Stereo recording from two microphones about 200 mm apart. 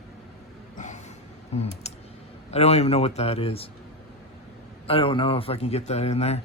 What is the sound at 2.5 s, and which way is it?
Speech, 30° left (ahead or behind).